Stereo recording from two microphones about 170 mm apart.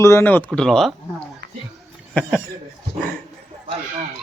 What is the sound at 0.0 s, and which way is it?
Speech, 15° left (ahead or behind).